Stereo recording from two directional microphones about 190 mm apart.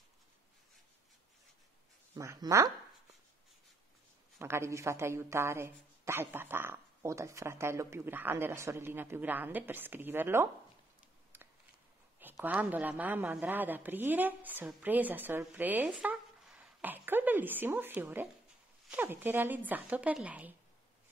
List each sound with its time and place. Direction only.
2.1 s speech: 15° right (ahead or behind)
4.4 s speech: 15° right (ahead or behind)
12.2 s a man's voice: 10° right (ahead or behind)